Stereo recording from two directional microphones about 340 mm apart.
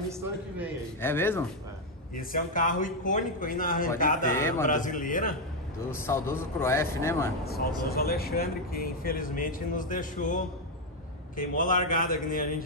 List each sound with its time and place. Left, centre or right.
1.0 s a man's voice: centre
2.1 s speech: left
4.4 s a man's voice: centre
4.6 s speech: left
5.9 s a man's voice: centre
7.9 s speech: left